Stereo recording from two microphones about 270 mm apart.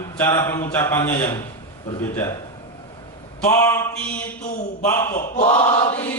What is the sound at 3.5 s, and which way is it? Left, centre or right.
A man's voice, centre.